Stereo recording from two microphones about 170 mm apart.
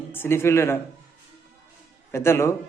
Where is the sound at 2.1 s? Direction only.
15° left (ahead or behind).